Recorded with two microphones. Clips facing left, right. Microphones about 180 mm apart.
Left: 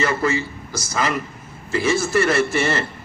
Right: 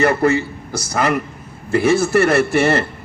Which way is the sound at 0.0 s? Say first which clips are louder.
Right 6 dB; 60° right (ahead or behind).